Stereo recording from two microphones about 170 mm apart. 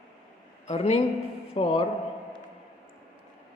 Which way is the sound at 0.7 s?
35° left (ahead or behind).